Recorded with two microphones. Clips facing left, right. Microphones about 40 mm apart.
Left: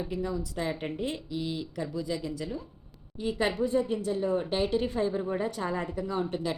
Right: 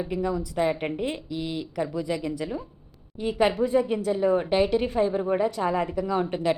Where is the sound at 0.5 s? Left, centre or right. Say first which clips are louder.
Right 7 dB; right.